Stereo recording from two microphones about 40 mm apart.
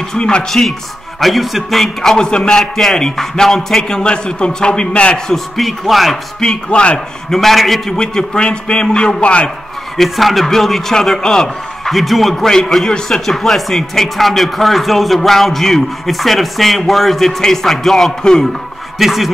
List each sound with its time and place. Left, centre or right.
0.2 s a man's voice: left
0.5 s speech: centre
2.1 s a man's voice: centre
2.5 s a man's voice: centre
4.0 s a man's voice: left
5.3 s speech: centre
6.4 s a man's voice: left
7.2 s speech: centre
7.9 s a man's voice: centre
9.9 s a man's voice: centre
11.9 s speech: centre
12.4 s a man's voice: centre